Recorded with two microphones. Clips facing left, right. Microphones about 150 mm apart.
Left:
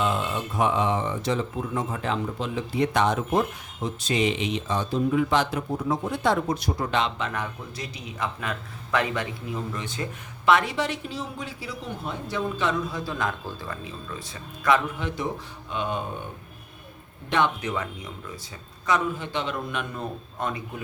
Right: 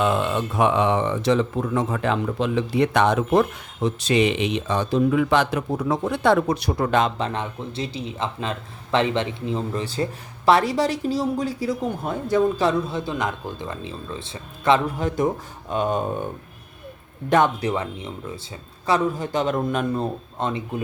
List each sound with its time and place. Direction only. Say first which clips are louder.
0.0 s speech: right 5 dB; 65° right (ahead or behind)
7.2 s a man's voice: right 4 dB; 30° right (ahead or behind)
12.6 s speech: right 5 dB; 30° right (ahead or behind)
14.9 s speech: right 7 dB; 45° right (ahead or behind)
17.2 s a man's voice: right 6 dB; 45° right (ahead or behind); by 20.8 s 30° right (ahead or behind)